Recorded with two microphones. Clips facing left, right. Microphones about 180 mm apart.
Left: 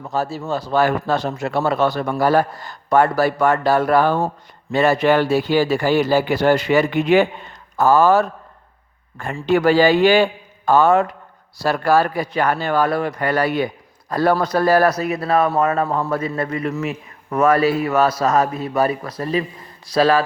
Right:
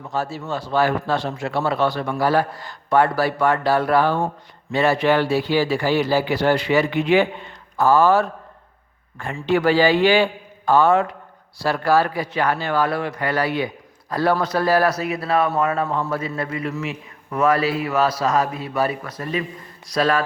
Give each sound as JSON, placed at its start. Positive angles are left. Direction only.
{"t": 0.1, "sound": "a man's voice", "side_deg": 40}